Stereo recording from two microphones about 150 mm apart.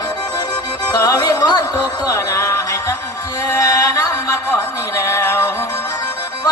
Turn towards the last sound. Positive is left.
turn(degrees=20)  # may be behind; listen again after turning